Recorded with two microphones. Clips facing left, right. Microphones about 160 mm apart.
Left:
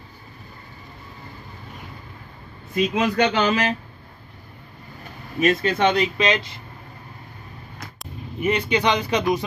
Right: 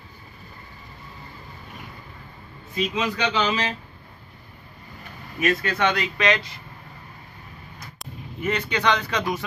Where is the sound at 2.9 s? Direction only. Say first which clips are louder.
Left 5 dB; 50° left (ahead or behind).